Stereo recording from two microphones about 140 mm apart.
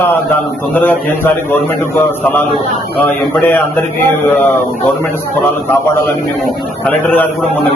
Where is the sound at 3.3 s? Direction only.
15° left (ahead or behind).